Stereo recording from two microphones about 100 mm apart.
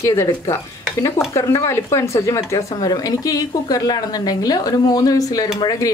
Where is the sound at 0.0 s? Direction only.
30° left (ahead or behind).